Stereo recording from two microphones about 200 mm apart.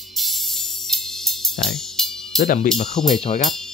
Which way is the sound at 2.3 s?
40° left (ahead or behind).